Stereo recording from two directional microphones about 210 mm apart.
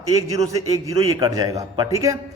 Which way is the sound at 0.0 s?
15° right (ahead or behind).